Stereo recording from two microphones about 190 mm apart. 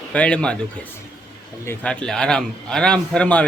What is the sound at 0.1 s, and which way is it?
Speech, 5° left (ahead or behind).